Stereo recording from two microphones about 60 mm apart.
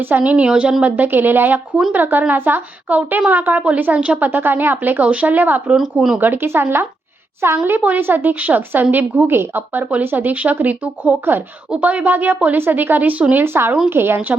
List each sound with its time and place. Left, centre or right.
0.0 s a woman's voice: right
5.7 s speech: centre
6.1 s a woman's voice: right
7.5 s a woman's voice: right
13.3 s a woman's voice: right